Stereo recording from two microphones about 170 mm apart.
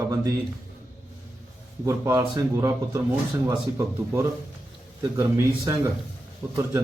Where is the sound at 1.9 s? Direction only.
15° right (ahead or behind).